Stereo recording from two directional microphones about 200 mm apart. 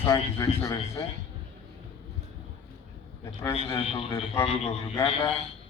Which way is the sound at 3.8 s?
30° left (ahead or behind).